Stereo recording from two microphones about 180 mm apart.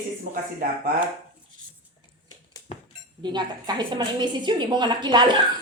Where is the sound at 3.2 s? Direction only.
25° right (ahead or behind).